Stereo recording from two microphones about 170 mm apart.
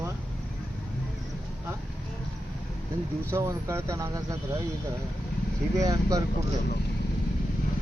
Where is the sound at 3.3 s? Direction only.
15° right (ahead or behind).